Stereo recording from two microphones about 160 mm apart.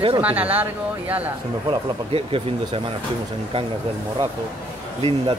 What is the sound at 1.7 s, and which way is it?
Speech, 35° right (ahead or behind).